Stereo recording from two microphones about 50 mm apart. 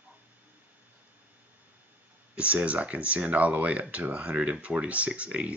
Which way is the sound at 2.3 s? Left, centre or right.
Right.